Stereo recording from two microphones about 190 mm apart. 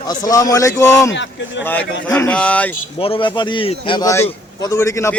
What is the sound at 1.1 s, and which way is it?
Speech, 70° left (ahead or behind).